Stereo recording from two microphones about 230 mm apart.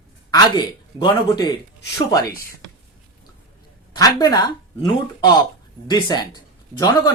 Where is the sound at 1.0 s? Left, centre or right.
Centre.